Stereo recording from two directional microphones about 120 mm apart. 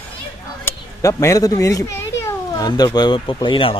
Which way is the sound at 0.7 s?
25° left (ahead or behind).